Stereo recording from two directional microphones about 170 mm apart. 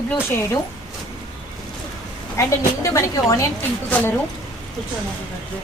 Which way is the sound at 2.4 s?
20° left (ahead or behind).